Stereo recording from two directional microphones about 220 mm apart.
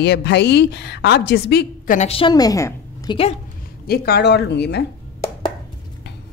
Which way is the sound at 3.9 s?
45° left (ahead or behind).